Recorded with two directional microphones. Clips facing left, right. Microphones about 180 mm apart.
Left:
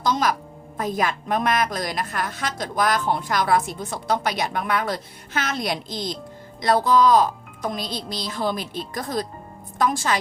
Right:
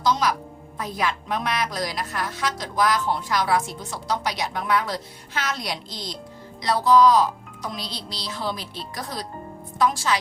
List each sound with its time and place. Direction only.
0.0 s a woman's voice: 50° left (ahead or behind)